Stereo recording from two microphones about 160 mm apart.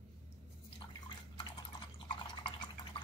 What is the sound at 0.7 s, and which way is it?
Drip, 30° left (ahead or behind).